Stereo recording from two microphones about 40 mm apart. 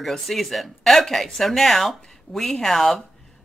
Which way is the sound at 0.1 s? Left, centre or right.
Centre.